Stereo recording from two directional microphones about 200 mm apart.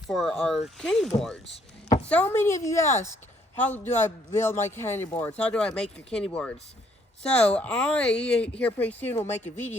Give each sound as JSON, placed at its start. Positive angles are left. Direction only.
{"t": 0.1, "sound": "a man's voice", "side_deg": 0}
{"t": 2.8, "sound": "speech", "side_deg": 35}
{"t": 3.5, "sound": "a man's voice", "side_deg": 10}